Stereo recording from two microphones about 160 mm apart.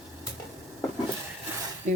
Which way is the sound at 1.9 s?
55° right (ahead or behind).